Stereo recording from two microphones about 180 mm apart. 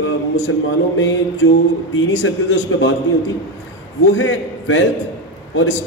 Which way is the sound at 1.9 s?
90° left.